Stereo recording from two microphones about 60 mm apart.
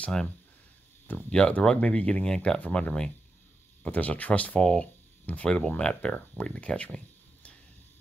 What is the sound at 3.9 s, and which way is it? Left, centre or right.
Speech, left.